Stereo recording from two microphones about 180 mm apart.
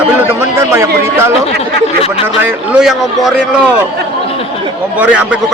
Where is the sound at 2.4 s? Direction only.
5° right (ahead or behind).